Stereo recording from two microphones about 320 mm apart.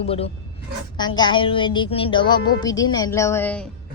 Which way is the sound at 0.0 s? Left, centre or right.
Centre.